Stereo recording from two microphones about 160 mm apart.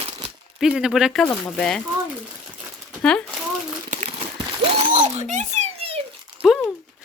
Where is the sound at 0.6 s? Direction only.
5° right (ahead or behind).